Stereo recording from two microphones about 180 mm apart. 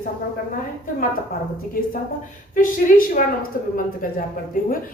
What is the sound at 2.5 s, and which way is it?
Speech, 50° left (ahead or behind).